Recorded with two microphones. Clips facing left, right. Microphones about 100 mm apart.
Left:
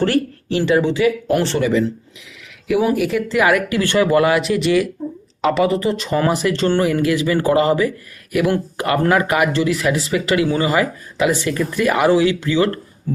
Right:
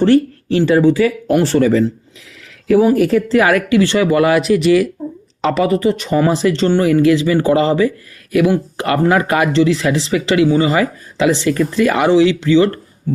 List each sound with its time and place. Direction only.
0.0 s speech: 30° right (ahead or behind)
4.3 s speech: 25° left (ahead or behind)
5.8 s speech: 25° right (ahead or behind)